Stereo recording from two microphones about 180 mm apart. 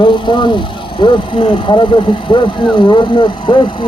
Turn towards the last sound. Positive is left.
turn(degrees=25)  # may be behind; listen again after turning